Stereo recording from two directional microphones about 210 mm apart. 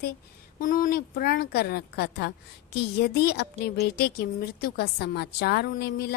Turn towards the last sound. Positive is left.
turn(degrees=50)  # may be behind; listen again after turning